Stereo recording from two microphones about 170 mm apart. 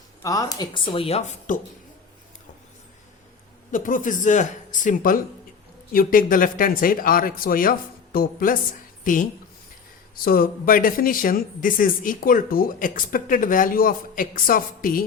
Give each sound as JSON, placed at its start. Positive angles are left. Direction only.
{"t": 0.2, "sound": "speech", "side_deg": 20}
{"t": 1.5, "sound": "speech", "side_deg": 50}
{"t": 3.7, "sound": "speech", "side_deg": 50}
{"t": 10.2, "sound": "speech", "side_deg": 60}